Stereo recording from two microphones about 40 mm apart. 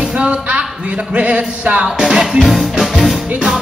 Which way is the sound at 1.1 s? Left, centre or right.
Right.